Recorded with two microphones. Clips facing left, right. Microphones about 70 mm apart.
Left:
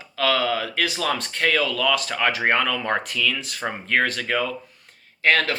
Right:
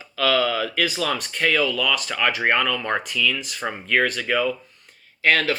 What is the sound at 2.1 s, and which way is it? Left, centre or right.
Speech, left.